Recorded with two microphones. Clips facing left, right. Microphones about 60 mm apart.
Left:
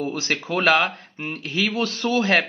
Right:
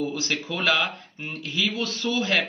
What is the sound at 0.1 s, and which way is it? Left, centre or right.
A man's voice, left.